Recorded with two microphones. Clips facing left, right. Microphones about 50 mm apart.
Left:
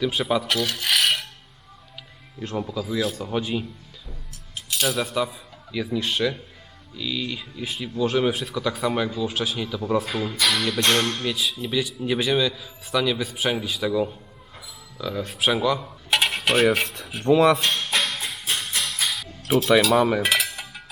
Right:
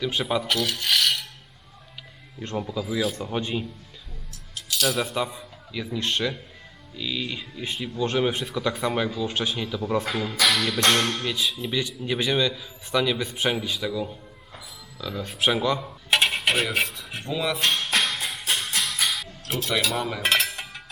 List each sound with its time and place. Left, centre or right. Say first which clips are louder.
0.0 s speech: left 2 dB; centre
2.4 s speech: left 1 dB; centre
4.8 s speech: left 1 dB; centre
14.9 s coin: left 3 dB; centre
17.2 s speech: left 11 dB; left
17.7 s music: even; centre
19.5 s speech: left 8 dB; centre
20.2 s cutlery: even; centre